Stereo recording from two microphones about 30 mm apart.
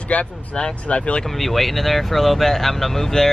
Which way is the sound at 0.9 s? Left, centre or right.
Left.